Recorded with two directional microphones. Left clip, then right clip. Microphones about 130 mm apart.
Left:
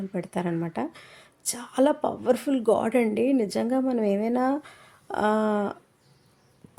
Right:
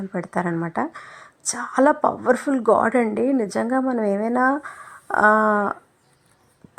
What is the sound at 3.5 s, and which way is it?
A woman's voice, 5° left (ahead or behind).